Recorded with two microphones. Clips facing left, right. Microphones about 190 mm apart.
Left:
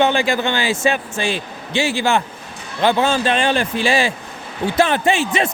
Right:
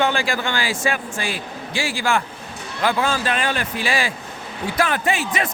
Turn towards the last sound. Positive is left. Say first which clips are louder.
# left 5 dB
turn(degrees=25)  # may be behind; listen again after turning